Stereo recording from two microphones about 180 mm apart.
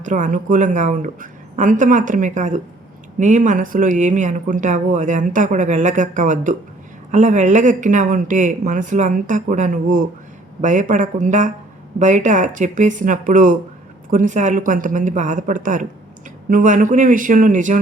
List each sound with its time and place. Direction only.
0.0 s speech: 45° right (ahead or behind)